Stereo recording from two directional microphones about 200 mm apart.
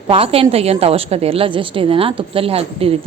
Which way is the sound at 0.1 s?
30° right (ahead or behind).